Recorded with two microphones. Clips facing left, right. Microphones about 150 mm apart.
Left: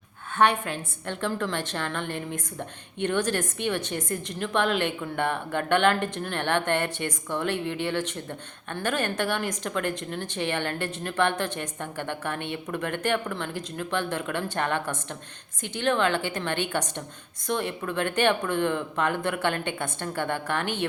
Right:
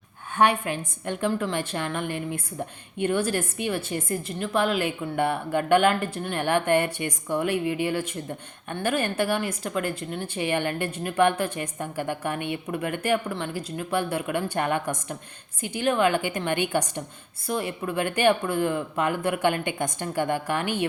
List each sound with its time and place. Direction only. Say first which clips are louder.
0.3 s speech: right 1 dB; 10° right (ahead or behind)